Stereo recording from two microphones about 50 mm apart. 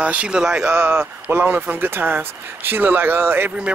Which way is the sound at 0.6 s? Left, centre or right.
Right.